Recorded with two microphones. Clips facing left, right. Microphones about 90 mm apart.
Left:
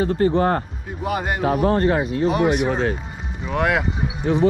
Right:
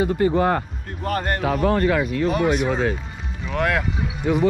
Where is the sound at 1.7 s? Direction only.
30° left (ahead or behind).